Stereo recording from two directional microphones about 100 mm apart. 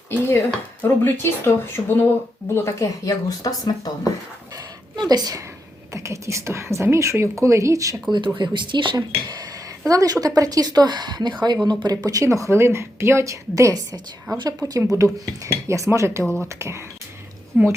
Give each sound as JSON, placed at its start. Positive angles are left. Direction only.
{"t": 0.3, "sound": "speech", "side_deg": 25}
{"t": 4.5, "sound": "a sound", "side_deg": -40}
{"t": 5.9, "sound": "speech", "side_deg": -30}
{"t": 8.4, "sound": "speech", "side_deg": -50}
{"t": 16.2, "sound": "speech", "side_deg": 10}
{"t": 16.6, "sound": "a woman's voice", "side_deg": -30}